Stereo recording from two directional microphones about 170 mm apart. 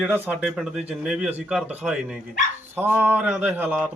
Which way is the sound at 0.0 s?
10° right (ahead or behind).